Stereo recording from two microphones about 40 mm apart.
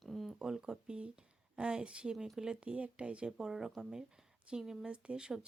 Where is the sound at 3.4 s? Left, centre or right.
Centre.